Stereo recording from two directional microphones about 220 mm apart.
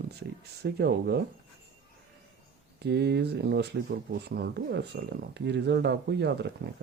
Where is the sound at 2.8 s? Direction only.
50° right (ahead or behind).